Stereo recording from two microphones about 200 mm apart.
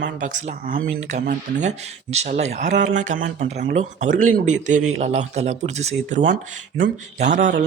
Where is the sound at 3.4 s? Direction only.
55° right (ahead or behind).